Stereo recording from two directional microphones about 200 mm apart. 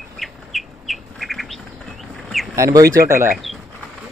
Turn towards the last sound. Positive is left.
turn(degrees=0)  # may be behind; listen again after turning